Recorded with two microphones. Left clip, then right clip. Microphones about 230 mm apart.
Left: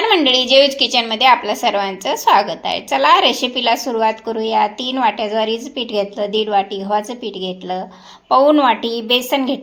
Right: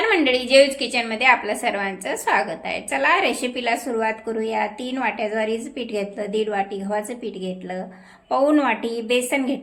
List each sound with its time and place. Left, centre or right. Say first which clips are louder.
0.1 s a woman's voice: left 5 dB; centre